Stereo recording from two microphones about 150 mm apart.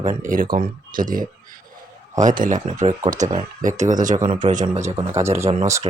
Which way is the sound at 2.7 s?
50° right (ahead or behind).